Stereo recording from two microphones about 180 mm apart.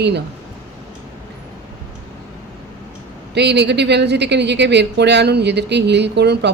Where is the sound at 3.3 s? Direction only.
70° right (ahead or behind).